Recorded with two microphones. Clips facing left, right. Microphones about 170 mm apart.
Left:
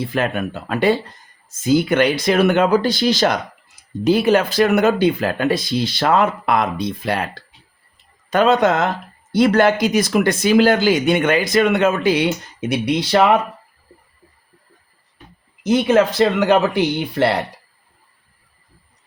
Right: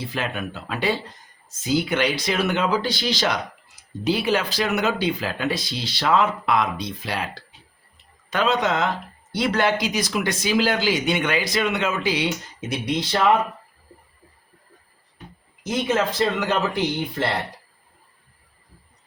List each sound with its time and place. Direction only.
0.1 s speech: 50° left (ahead or behind)
8.3 s speech: 50° left (ahead or behind); by 13.3 s 75° left (ahead or behind)
15.6 s speech: 70° left (ahead or behind)